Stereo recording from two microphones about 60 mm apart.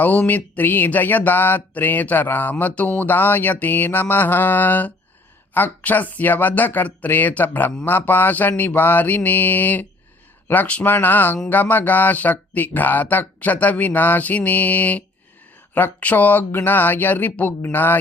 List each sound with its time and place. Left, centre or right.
0.0 s speech: left